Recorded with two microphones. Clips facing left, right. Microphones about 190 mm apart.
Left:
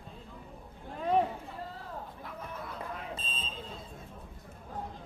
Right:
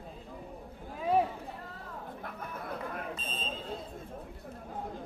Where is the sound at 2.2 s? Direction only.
55° right (ahead or behind).